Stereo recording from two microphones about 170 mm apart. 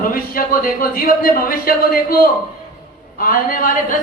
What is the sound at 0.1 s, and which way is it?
Speech, 55° left (ahead or behind).